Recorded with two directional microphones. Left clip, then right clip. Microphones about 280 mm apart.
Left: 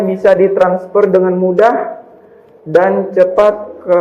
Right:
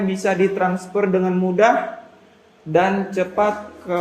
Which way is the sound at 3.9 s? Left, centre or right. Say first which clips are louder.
Left 12 dB; right.